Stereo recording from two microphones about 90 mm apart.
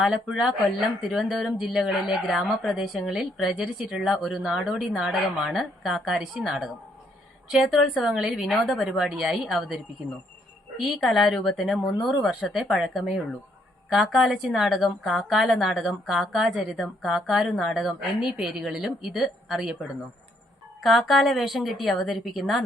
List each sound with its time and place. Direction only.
0.0 s speech: 5° right (ahead or behind)
10.8 s speech: centre (ahead or behind)
20.8 s speech: centre (ahead or behind)